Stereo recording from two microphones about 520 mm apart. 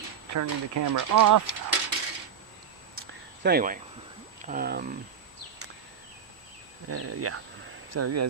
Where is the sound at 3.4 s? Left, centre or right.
Centre.